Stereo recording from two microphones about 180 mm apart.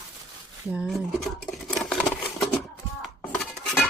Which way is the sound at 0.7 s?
Centre (ahead or behind).